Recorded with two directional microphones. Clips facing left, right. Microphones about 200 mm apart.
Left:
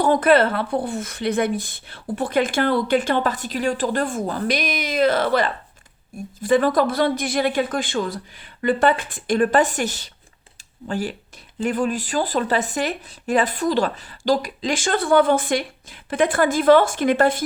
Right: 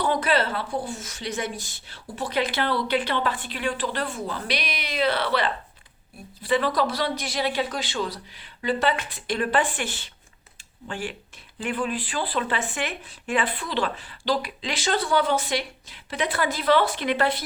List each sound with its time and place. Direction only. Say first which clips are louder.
0.0 s speech: left 7 dB; 50° left (ahead or behind)